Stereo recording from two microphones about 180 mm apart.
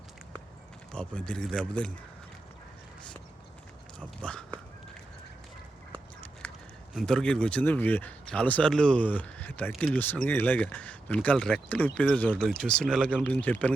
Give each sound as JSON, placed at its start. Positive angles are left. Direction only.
{"t": 0.9, "sound": "speech", "side_deg": 5}
{"t": 4.2, "sound": "a sound", "side_deg": 5}
{"t": 6.9, "sound": "speech", "side_deg": 5}
{"t": 13.2, "sound": "speech", "side_deg": 10}